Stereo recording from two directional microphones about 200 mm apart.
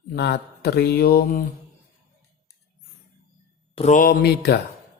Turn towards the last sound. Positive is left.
turn(degrees=55)  # may be behind; listen again after turning